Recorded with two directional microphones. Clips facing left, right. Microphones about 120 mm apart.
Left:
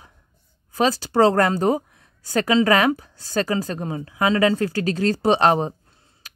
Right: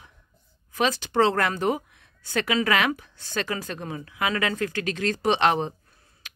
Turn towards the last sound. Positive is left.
turn(degrees=25)  # may be behind; listen again after turning